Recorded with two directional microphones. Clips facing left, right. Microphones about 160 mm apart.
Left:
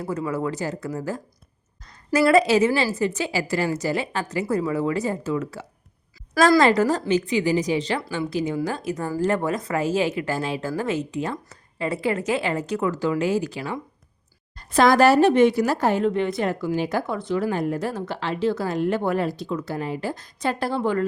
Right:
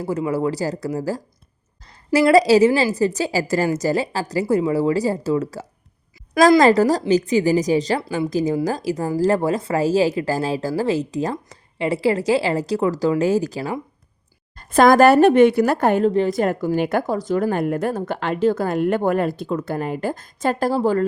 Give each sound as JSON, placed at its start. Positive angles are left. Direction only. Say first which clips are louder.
{"t": 0.0, "sound": "speech", "louder": "right 5 dB", "side_deg": -30}
{"t": 14.5, "sound": "speech", "louder": "right 4 dB", "side_deg": -50}
{"t": 16.0, "sound": "speech", "louder": "right 4 dB", "side_deg": -35}
{"t": 17.1, "sound": "speech", "louder": "right 4 dB", "side_deg": -40}